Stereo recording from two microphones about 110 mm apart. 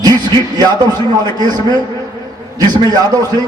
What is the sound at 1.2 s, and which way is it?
A man's voice, 35° right (ahead or behind).